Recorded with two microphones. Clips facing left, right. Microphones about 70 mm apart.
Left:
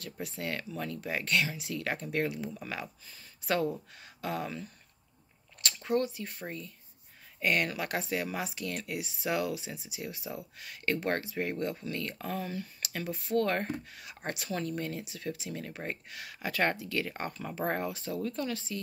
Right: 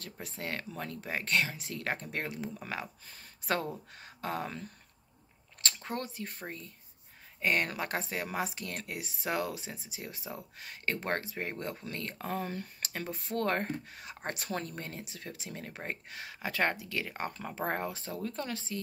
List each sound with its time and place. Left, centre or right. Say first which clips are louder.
0.0 s speech: left 3 dB; right
3.1 s speech: left 1 dB; right
3.5 s speech: left 4 dB; right
5.9 s speech: left 11 dB; right
17.8 s speech: left 3 dB; right